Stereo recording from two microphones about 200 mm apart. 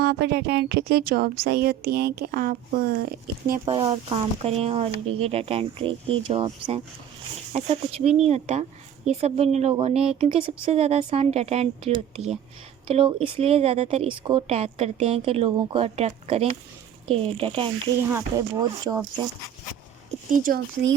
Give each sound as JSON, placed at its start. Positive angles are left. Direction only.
{"t": 0.0, "sound": "a woman's voice", "side_deg": -55}
{"t": 3.7, "sound": "speech", "side_deg": -25}